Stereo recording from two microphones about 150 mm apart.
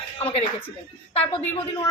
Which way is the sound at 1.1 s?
40° left (ahead or behind).